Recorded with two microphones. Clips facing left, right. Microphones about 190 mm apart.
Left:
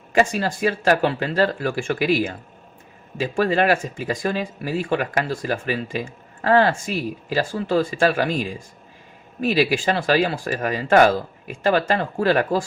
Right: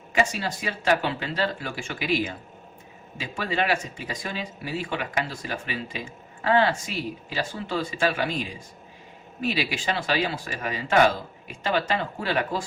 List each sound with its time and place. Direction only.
0.1 s speech: 45° left (ahead or behind)